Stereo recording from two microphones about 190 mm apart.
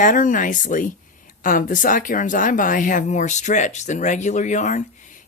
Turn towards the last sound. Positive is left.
turn(degrees=40)  # may be behind; listen again after turning